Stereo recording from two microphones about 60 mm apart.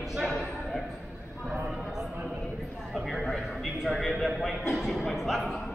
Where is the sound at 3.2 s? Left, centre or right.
Centre.